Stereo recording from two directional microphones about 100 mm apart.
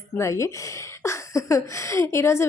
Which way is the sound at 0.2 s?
30° left (ahead or behind).